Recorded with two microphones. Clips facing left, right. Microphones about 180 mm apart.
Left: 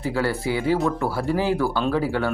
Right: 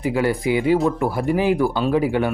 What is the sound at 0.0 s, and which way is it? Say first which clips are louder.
Speech: right 4 dB; 15° right (ahead or behind).